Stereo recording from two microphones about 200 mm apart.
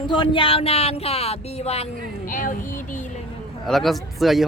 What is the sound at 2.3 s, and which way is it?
Speech, 40° left (ahead or behind).